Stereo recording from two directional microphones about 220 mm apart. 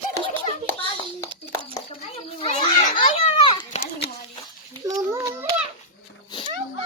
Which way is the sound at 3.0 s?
25° left (ahead or behind).